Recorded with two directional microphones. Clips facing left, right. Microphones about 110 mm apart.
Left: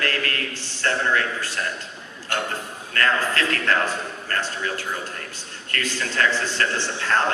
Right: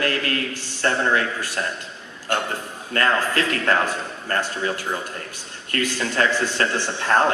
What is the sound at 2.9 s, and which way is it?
A man's voice, 20° right (ahead or behind).